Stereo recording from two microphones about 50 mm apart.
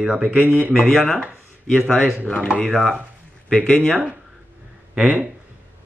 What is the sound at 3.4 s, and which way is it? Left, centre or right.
Speech, centre.